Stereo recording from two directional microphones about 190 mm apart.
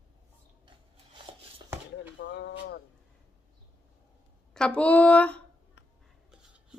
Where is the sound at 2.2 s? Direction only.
65° left (ahead or behind).